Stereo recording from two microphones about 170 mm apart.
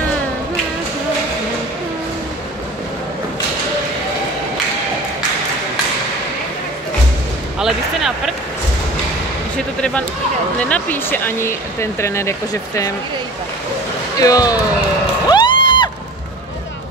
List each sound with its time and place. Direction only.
7.5 s a sound: centre (ahead or behind)
9.8 s speech: 5° left (ahead or behind)
14.2 s speech: 20° left (ahead or behind)
15.2 s cheering: 25° left (ahead or behind)